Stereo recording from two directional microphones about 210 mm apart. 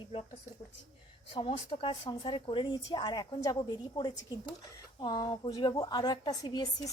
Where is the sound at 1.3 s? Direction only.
25° left (ahead or behind).